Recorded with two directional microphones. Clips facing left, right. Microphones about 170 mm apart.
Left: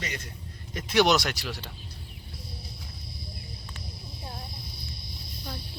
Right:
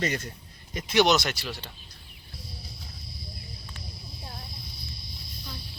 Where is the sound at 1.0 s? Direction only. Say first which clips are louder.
Even; 10° left (ahead or behind).